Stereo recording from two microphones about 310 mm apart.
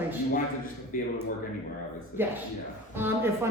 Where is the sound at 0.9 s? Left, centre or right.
Left.